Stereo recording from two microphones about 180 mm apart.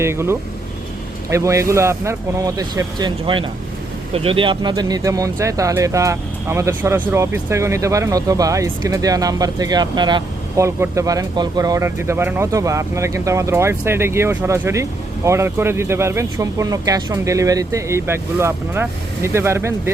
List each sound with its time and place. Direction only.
0.0 s speech: 15° right (ahead or behind)